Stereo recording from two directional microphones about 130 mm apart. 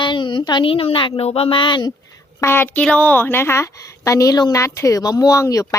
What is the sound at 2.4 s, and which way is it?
A woman's voice, 20° left (ahead or behind).